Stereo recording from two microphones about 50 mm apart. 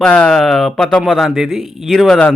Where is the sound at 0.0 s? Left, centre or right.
Centre.